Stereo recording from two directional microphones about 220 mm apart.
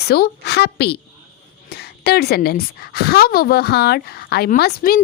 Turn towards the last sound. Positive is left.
turn(degrees=45)  # may be behind; listen again after turning